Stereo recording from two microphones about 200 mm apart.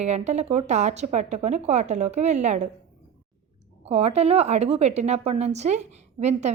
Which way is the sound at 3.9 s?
30° right (ahead or behind).